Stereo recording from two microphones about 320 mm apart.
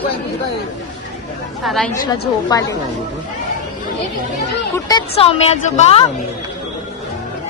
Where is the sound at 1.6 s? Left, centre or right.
Centre.